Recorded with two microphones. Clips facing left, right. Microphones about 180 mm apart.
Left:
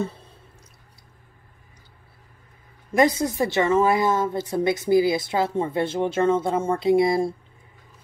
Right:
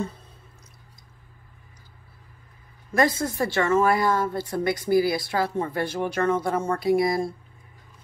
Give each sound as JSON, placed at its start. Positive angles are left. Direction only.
{"t": 2.9, "sound": "a woman's voice", "side_deg": 20}